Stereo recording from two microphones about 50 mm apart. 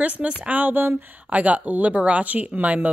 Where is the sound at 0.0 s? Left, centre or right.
Right.